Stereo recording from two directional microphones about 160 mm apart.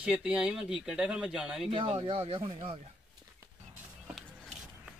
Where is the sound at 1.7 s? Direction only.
35° right (ahead or behind).